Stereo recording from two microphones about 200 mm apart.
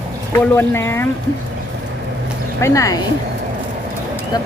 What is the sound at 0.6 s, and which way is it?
Speech, 15° left (ahead or behind).